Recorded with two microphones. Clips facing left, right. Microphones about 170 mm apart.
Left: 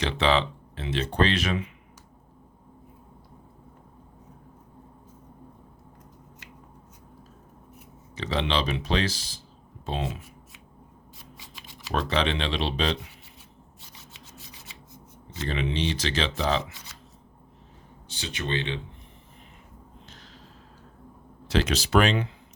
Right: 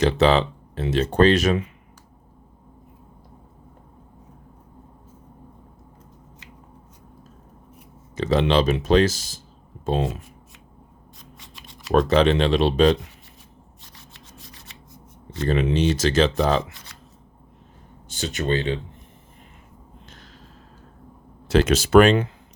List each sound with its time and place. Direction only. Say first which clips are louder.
0.0 s speech: right 6 dB; 40° right (ahead or behind)
8.1 s speech: right 8 dB; 45° right (ahead or behind)
11.9 s speech: right 9 dB; 45° right (ahead or behind)
15.4 s speech: right 8 dB; 45° right (ahead or behind)
18.1 s speech: right 7 dB; 45° right (ahead or behind)
20.1 s a sound: right 2 dB; 50° right (ahead or behind)
21.4 s speech: right 7 dB; 45° right (ahead or behind)